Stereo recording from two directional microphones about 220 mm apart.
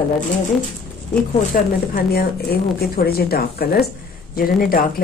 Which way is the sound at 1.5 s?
40° left (ahead or behind).